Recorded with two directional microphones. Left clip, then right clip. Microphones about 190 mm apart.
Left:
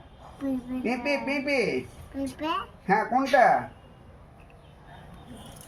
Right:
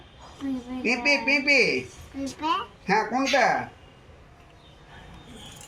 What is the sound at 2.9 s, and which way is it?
Speech, 35° left (ahead or behind).